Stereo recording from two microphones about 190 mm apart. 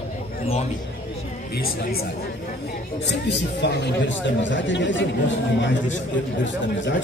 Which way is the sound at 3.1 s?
65° left (ahead or behind).